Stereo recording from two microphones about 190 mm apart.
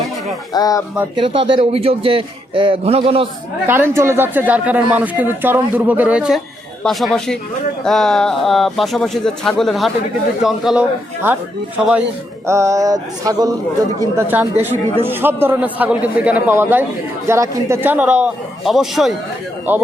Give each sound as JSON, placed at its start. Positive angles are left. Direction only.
{"t": 0.5, "sound": "speech", "side_deg": 20}
{"t": 1.1, "sound": "a man's voice", "side_deg": -25}
{"t": 3.7, "sound": "speech", "side_deg": -10}
{"t": 12.5, "sound": "a man's voice", "side_deg": -15}